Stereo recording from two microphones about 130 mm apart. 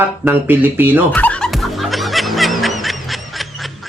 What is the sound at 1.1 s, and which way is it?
Music, 10° left (ahead or behind).